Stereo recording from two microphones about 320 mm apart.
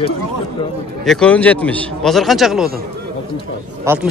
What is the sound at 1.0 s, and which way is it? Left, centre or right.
A man's voice, centre.